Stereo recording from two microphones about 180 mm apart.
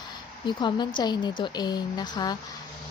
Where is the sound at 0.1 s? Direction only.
25° left (ahead or behind).